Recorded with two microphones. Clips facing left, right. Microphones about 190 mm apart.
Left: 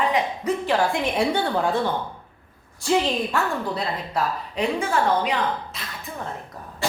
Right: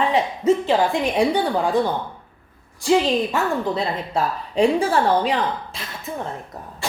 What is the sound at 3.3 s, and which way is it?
A woman's voice, 25° right (ahead or behind).